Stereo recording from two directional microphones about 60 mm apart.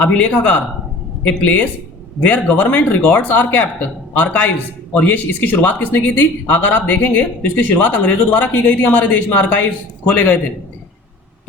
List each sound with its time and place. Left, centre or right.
0.0 s a man's voice: left